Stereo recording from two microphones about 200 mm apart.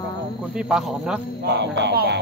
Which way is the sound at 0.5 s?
5° right (ahead or behind).